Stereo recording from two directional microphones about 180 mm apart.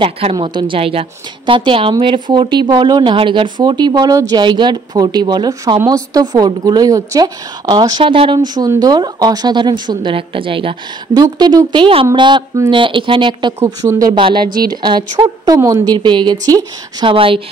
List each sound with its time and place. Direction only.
0.0 s a woman's voice: 30° right (ahead or behind)